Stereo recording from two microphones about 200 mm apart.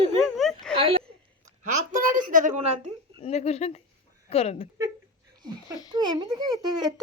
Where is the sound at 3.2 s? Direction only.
35° left (ahead or behind).